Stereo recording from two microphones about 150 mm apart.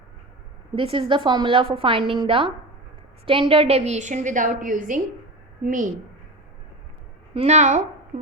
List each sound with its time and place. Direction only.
0.8 s a woman's voice: 35° right (ahead or behind); by 5.9 s 60° right (ahead or behind)
7.3 s a woman's voice: 50° right (ahead or behind)
8.1 s beatboxing: 55° right (ahead or behind)